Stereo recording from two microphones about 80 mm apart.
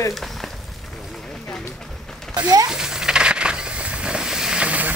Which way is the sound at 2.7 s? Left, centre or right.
Centre.